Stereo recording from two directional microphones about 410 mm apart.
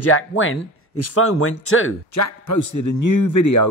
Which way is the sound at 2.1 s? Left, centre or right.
Left.